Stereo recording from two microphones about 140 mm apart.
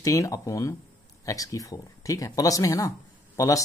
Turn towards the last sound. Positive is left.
turn(degrees=20)  # may be behind; listen again after turning